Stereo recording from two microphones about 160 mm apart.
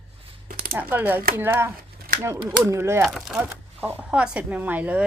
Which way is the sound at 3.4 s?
10° right (ahead or behind).